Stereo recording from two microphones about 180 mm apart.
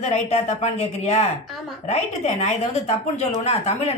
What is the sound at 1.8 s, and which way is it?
Speech, 40° left (ahead or behind).